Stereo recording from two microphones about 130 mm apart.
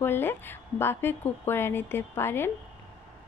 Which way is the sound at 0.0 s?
15° left (ahead or behind).